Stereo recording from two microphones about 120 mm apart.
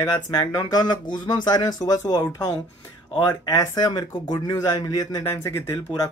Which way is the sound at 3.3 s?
25° left (ahead or behind).